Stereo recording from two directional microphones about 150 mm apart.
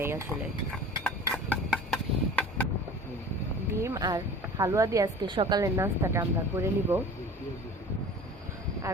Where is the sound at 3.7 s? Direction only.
20° right (ahead or behind).